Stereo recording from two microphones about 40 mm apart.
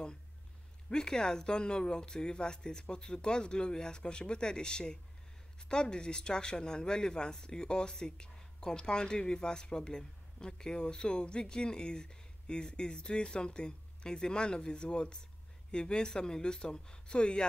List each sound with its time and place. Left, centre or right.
0.8 s speech: centre